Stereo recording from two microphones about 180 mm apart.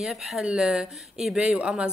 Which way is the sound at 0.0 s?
Centre (ahead or behind).